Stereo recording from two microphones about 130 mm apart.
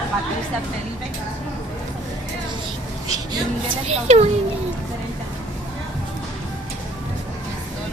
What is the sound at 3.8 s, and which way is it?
Speech, 55° right (ahead or behind).